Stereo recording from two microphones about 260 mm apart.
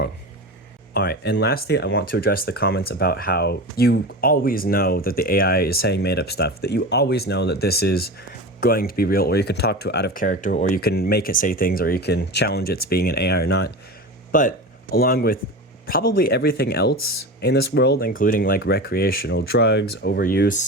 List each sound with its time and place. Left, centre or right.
0.9 s speech: left